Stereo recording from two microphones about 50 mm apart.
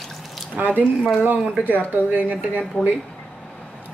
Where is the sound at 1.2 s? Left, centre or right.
Right.